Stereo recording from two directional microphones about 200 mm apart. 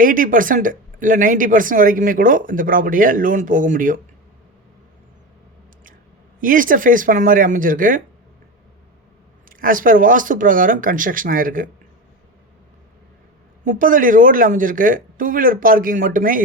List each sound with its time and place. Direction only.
0.0 s speech: 45° right (ahead or behind)
6.4 s speech: 45° right (ahead or behind)
9.5 s speech: 45° right (ahead or behind)
13.7 s speech: 40° right (ahead or behind)